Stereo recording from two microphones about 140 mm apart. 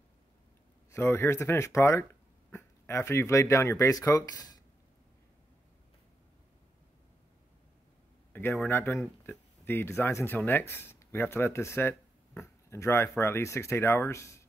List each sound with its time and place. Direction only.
0.9 s speech: 15° left (ahead or behind)
8.3 s a sound: 15° left (ahead or behind)
8.6 s speech: 15° left (ahead or behind)